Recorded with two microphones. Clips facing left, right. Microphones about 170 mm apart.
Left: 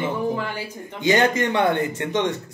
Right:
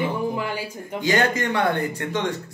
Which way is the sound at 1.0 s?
20° left (ahead or behind).